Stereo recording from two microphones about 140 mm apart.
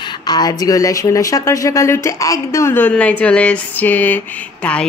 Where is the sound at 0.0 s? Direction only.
30° left (ahead or behind).